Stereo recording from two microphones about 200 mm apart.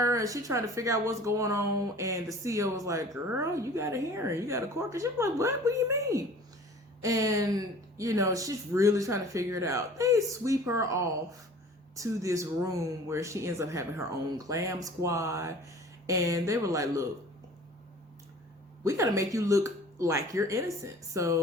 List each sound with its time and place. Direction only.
0.0 s speech: 15° right (ahead or behind)
18.9 s speech: 15° right (ahead or behind)